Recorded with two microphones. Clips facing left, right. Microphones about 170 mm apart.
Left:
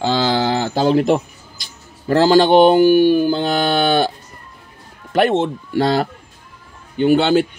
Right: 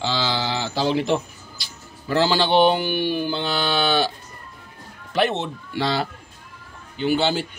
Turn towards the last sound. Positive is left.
turn(degrees=60)  # may be behind; listen again after turning